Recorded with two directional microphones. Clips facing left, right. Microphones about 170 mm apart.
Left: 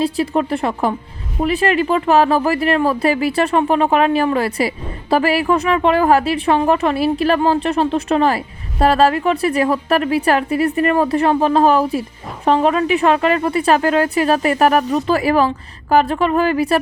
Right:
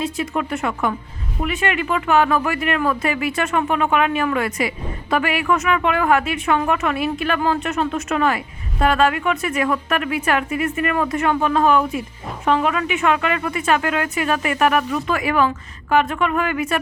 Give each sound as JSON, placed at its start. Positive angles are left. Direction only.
{"t": 0.0, "sound": "speech", "side_deg": 35}